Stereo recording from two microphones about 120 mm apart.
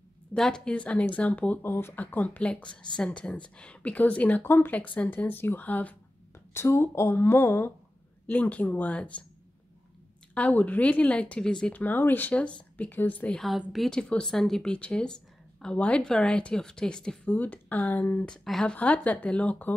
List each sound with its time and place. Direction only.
0.3 s speech: 5° left (ahead or behind)
10.3 s speech: 10° left (ahead or behind)